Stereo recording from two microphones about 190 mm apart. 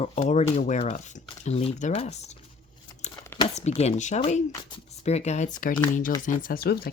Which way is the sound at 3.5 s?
35° left (ahead or behind).